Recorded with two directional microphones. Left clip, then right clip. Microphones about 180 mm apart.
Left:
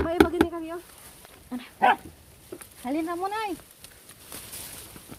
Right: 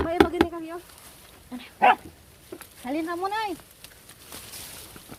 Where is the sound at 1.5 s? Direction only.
40° left (ahead or behind).